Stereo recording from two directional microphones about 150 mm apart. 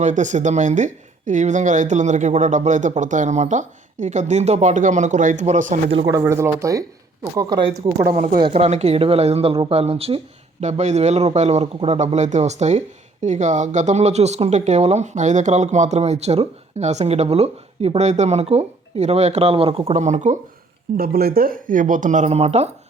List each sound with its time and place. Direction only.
0.0 s speech: 55° right (ahead or behind)
6.1 s speech: 20° right (ahead or behind)
8.4 s speech: 40° right (ahead or behind)
20.9 s speech: 80° right; by 22.7 s 45° right (ahead or behind)